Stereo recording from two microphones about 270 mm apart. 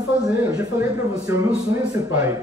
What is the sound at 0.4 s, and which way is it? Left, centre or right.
A man's voice, centre.